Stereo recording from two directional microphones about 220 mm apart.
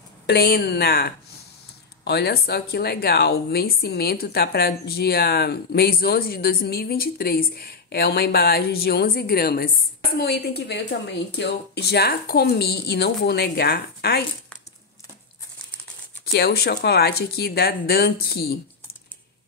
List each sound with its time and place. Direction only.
0.3 s speech: 45° left (ahead or behind)
16.3 s speech: 45° left (ahead or behind)